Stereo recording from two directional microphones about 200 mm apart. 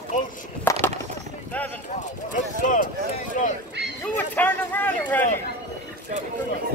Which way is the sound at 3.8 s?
10° left (ahead or behind).